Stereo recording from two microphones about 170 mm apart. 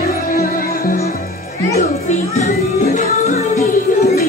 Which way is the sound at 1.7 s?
40° left (ahead or behind).